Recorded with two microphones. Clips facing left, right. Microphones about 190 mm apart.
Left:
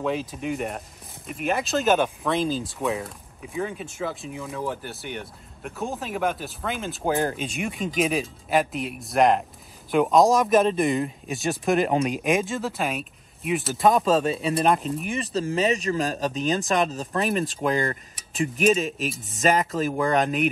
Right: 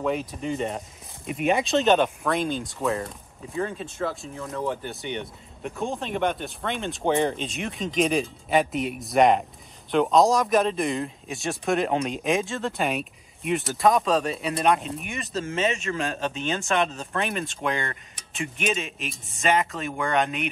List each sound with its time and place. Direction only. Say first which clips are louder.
0.3 s speech: right 1 dB; 5° left (ahead or behind)
15.0 s speech: left 4 dB; 35° left (ahead or behind)
18.9 s speech: left 6 dB; centre (ahead or behind)
19.4 s speech: left 2 dB; 40° left (ahead or behind)